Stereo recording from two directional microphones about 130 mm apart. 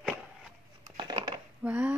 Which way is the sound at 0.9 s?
35° right (ahead or behind).